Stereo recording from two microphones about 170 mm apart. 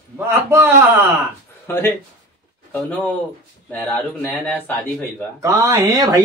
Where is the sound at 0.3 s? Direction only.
15° right (ahead or behind).